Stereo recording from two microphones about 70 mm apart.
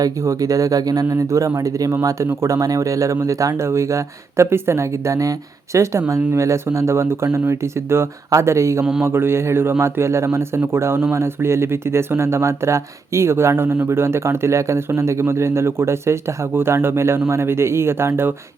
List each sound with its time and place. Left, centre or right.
0.0 s speech: right
1.0 s speech: right
8.8 s speech: centre
9.0 s speech: right